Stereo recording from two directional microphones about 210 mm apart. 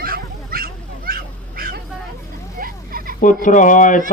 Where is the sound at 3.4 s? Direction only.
40° left (ahead or behind).